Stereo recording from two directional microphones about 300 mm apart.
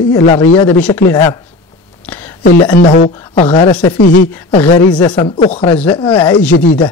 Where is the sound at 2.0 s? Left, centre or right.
Centre.